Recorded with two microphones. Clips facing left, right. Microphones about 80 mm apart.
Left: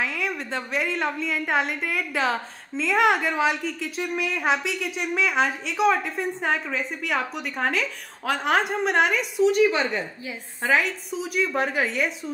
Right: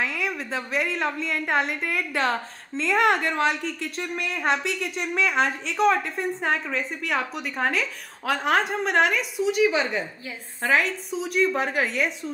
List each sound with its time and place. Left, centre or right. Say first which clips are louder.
0.0 s a woman's voice: even; centre